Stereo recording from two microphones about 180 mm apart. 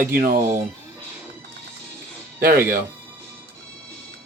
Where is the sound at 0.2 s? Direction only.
50° right (ahead or behind).